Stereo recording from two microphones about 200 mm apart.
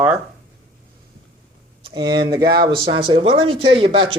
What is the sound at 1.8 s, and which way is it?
Speech, 25° right (ahead or behind).